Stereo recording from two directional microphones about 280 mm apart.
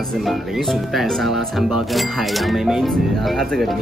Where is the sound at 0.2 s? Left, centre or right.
Centre.